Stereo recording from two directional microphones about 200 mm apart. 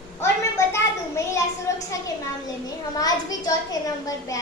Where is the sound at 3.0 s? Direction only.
15° left (ahead or behind).